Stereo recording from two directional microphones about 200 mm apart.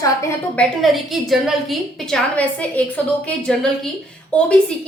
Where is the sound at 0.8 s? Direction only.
Centre (ahead or behind).